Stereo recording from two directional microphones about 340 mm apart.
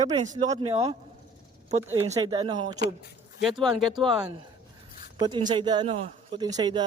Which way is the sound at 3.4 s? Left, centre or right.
Centre.